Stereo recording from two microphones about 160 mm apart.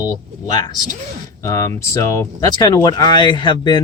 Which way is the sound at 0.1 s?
25° left (ahead or behind).